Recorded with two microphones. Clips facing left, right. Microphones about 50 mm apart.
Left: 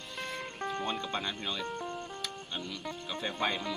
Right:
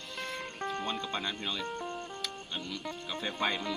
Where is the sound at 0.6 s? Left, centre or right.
Centre.